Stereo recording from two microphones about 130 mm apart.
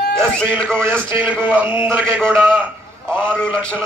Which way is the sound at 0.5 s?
15° right (ahead or behind).